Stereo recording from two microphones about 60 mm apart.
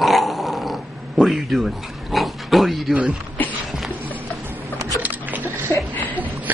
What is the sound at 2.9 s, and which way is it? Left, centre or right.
Speech, centre.